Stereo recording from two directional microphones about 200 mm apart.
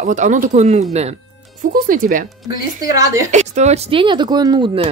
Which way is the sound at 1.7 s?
45° right (ahead or behind).